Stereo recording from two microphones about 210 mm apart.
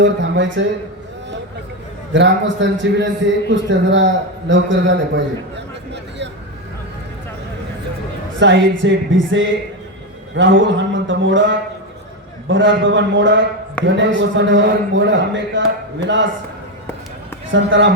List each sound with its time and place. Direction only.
0.0 s a man's voice: 60° right (ahead or behind)
2.1 s a man's voice: 55° right (ahead or behind)
8.4 s a man's voice: 60° right (ahead or behind)
17.5 s a man's voice: 60° right (ahead or behind)